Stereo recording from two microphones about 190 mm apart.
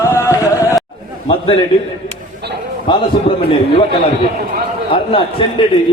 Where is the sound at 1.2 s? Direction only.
30° left (ahead or behind).